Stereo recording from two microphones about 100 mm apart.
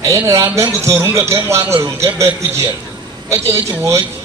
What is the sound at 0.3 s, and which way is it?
A man's voice, 35° right (ahead or behind).